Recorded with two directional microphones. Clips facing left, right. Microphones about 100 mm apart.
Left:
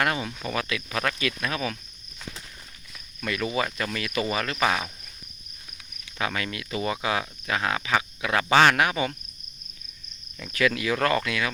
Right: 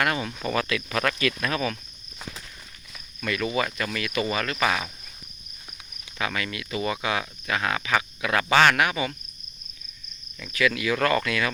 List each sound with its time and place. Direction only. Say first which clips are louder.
0.0 s cricket: even; 20° left (ahead or behind)
0.4 s speech: right 5 dB; 10° left (ahead or behind)
3.2 s cricket: right 1 dB; 25° left (ahead or behind)
6.1 s cricket: even; 30° left (ahead or behind)
10.4 s cricket: even; 40° left (ahead or behind); by 11.5 s 15° left (ahead or behind)